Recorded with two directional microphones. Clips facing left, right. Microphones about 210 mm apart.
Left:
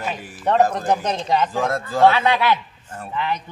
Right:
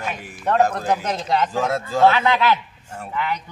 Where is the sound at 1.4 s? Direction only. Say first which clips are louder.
Even; 10° right (ahead or behind).